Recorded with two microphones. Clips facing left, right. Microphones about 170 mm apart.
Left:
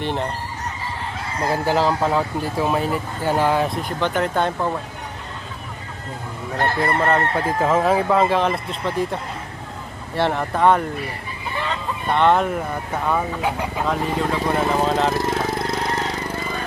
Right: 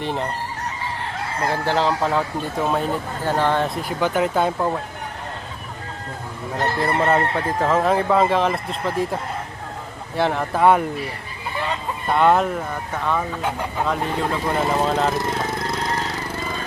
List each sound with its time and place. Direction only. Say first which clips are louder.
0.0 s speech: left 1 dB; centre (ahead or behind)
1.6 s speech: left 2 dB; 5° left (ahead or behind)
6.8 s speech: right 2 dB; centre (ahead or behind)
10.2 s speech: even; centre (ahead or behind)
12.0 s speech: even; 5° right (ahead or behind)
13.1 s speech: left 1 dB; 10° left (ahead or behind)